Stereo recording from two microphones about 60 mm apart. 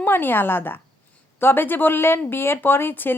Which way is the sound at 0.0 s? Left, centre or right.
Left.